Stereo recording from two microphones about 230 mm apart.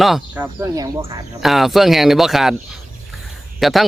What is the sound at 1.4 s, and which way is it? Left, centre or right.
Speech, centre.